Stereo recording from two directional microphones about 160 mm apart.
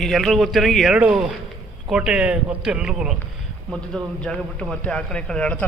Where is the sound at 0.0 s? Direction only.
Centre (ahead or behind).